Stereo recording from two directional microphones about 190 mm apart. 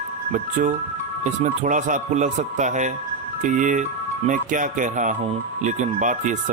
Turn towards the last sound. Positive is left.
turn(degrees=-45)  # may be behind; listen again after turning